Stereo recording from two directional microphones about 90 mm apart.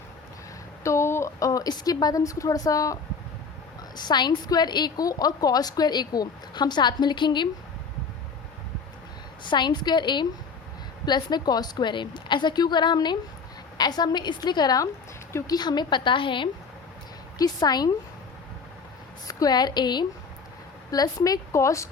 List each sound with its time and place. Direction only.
0.9 s a woman's voice: 30° left (ahead or behind)
3.9 s a woman's voice: 55° left (ahead or behind)
9.5 s a woman's voice: 55° left (ahead or behind)
17.3 s a woman's voice: 50° left (ahead or behind)
19.3 s a woman's voice: 45° left (ahead or behind)
20.9 s a woman's voice: 45° left (ahead or behind)